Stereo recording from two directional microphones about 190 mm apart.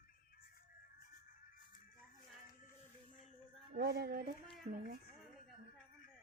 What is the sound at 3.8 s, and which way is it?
Speech, 55° right (ahead or behind).